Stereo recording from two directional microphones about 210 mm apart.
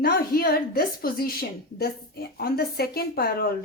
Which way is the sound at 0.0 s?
45° left (ahead or behind).